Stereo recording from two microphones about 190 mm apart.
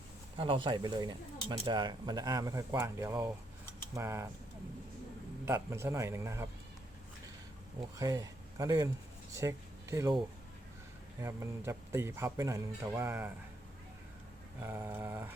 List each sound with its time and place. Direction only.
0.3 s speech: 25° right (ahead or behind)
5.5 s speech: 15° right (ahead or behind)
7.9 s speech: 20° right (ahead or behind)
11.2 s speech: 15° right (ahead or behind)
14.6 s speech: 10° right (ahead or behind)